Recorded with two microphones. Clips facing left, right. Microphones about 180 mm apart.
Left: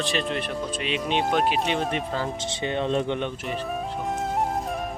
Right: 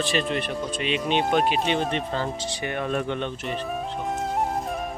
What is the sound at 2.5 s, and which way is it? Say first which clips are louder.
Speech: left 2 dB; 25° left (ahead or behind).